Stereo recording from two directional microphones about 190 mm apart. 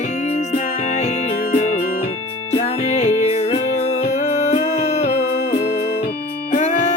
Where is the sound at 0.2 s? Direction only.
35° left (ahead or behind).